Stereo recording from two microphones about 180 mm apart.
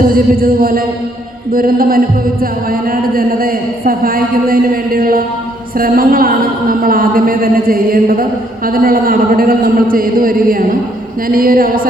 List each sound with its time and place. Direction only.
0.0 s a woman's voice: 55° right (ahead or behind)